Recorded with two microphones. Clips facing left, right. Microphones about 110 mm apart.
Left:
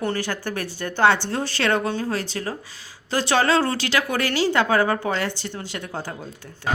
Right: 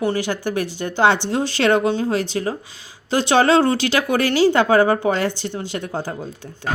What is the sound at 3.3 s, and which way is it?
A woman's voice, 25° right (ahead or behind).